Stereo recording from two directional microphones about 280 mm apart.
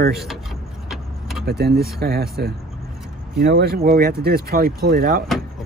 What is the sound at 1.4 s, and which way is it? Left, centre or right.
Speech, right.